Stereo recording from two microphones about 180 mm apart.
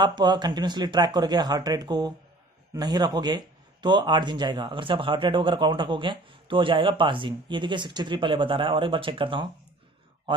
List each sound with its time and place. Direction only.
0.0 s speech: 25° right (ahead or behind)